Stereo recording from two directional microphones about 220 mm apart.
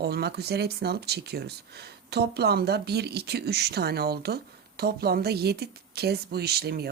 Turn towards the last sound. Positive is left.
turn(degrees=-45)  # may be behind; listen again after turning